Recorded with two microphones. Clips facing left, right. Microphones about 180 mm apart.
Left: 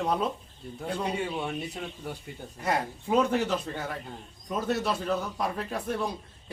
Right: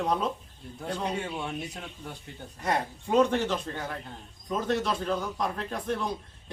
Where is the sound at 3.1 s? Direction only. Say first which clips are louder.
Right 1 dB; 5° left (ahead or behind).